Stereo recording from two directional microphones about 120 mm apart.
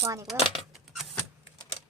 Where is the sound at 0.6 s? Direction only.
Centre (ahead or behind).